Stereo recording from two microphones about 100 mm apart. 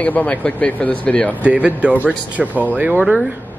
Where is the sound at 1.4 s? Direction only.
15° right (ahead or behind).